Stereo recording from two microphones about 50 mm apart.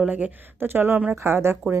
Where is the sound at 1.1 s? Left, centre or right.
Right.